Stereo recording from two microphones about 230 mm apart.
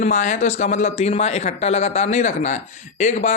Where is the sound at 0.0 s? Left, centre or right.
Left.